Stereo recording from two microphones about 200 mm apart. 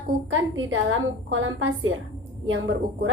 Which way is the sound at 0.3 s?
80° right.